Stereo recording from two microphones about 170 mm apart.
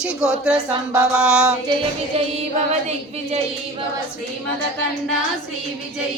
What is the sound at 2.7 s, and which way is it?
Female singing, 40° right (ahead or behind).